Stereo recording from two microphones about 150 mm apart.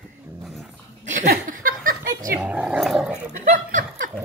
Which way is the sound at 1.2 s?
75° right (ahead or behind).